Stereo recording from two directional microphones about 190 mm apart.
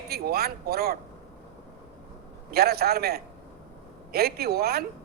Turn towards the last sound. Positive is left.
turn(degrees=-55)  # may be behind; listen again after turning